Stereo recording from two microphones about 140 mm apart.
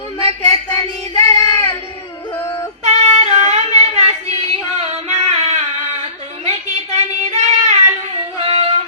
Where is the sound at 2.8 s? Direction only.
55° right (ahead or behind).